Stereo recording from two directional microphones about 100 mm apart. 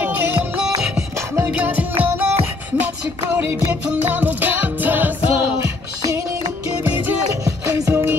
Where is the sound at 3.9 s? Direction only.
15° right (ahead or behind).